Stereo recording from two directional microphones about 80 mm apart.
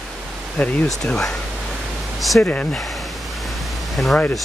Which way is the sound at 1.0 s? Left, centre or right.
Centre.